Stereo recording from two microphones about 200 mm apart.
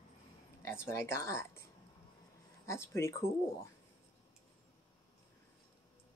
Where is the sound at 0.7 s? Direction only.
15° left (ahead or behind).